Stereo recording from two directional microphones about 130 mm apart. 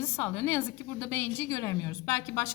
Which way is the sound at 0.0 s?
15° left (ahead or behind).